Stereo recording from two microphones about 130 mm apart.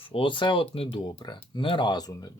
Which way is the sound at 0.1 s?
40° left (ahead or behind).